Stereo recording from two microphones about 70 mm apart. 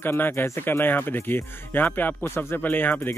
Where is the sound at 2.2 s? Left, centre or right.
Left.